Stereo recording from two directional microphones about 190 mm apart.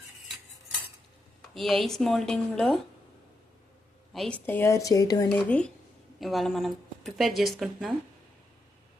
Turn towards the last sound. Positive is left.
turn(degrees=0)  # may be behind; listen again after turning